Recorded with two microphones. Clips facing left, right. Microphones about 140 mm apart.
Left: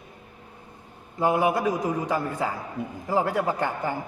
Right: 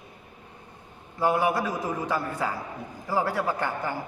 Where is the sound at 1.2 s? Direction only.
20° left (ahead or behind).